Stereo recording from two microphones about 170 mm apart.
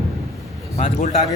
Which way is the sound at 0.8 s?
40° left (ahead or behind).